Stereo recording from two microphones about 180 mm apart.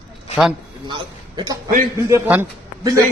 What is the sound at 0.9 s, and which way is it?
Speech, 25° right (ahead or behind).